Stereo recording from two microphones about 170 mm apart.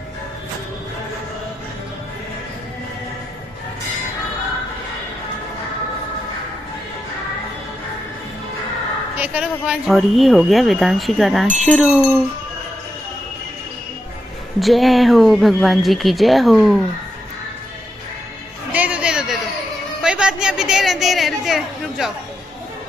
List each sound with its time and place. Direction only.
9.1 s speech: 10° right (ahead or behind)
14.6 s speech: centre (ahead or behind)
18.7 s music: 10° right (ahead or behind)
20.0 s chatter: 5° right (ahead or behind)